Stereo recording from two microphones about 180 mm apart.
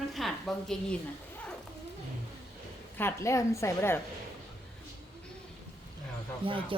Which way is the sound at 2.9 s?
15° left (ahead or behind).